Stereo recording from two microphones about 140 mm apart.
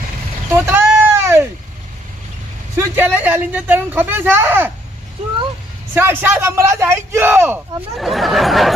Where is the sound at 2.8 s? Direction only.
15° right (ahead or behind).